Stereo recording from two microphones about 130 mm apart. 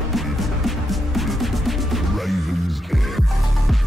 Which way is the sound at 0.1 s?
Centre (ahead or behind).